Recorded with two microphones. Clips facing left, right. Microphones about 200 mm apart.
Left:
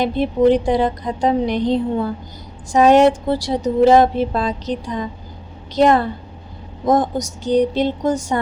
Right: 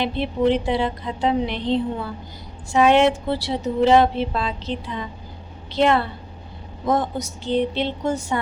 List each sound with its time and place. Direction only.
0.0 s a woman's voice: 45° left (ahead or behind)